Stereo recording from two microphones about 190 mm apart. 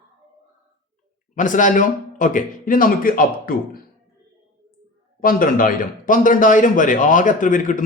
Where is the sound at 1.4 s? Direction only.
40° left (ahead or behind).